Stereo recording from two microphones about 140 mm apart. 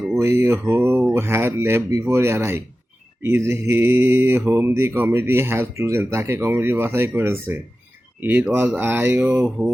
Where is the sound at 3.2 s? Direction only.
20° right (ahead or behind).